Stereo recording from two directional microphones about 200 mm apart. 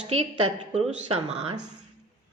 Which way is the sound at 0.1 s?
30° right (ahead or behind).